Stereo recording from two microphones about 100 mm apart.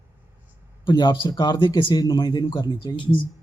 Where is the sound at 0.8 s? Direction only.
45° left (ahead or behind).